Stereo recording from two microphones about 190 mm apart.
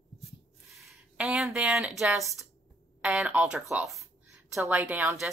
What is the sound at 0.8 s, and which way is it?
A woman's voice, 5° right (ahead or behind).